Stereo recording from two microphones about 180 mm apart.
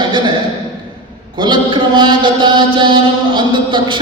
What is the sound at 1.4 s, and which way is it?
Mantra, 25° right (ahead or behind).